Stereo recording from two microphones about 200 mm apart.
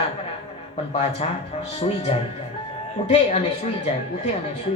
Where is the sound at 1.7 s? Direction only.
30° left (ahead or behind).